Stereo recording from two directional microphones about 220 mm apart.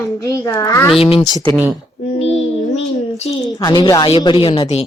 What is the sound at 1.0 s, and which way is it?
Speech, 25° left (ahead or behind).